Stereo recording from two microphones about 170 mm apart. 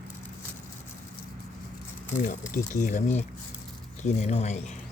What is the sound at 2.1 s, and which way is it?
A man's voice, 50° left (ahead or behind).